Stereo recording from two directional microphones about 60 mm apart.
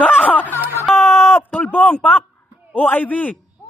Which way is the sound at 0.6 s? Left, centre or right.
Right.